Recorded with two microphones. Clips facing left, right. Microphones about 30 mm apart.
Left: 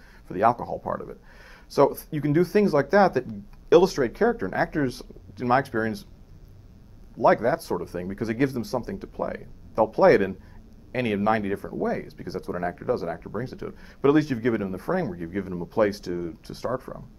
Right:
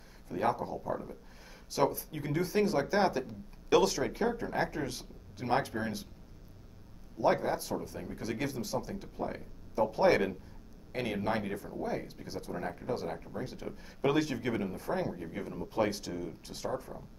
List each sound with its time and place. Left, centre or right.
0.3 s speech: left
4.6 s speech: left
7.2 s speech: left